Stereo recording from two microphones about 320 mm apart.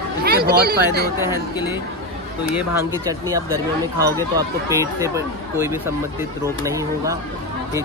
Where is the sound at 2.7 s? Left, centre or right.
Centre.